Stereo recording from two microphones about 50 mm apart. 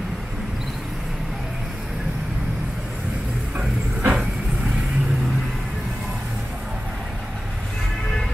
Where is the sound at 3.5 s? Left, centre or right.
Right.